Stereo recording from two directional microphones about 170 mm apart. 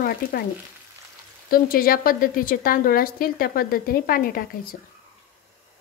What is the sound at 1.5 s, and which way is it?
A woman's voice, 60° left (ahead or behind).